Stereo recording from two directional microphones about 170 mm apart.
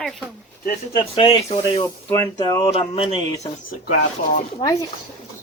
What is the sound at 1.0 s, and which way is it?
Speech, 30° left (ahead or behind).